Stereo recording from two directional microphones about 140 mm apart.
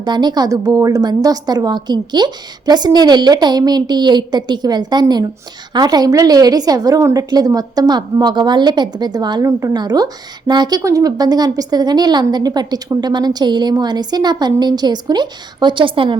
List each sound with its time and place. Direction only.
0.0 s a woman's voice: 30° right (ahead or behind)